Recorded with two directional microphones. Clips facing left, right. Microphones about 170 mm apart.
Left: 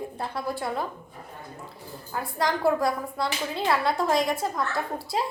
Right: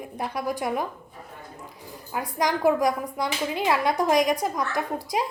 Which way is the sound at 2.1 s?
15° right (ahead or behind).